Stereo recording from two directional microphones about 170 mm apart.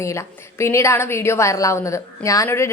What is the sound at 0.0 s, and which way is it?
A woman's voice, 15° left (ahead or behind).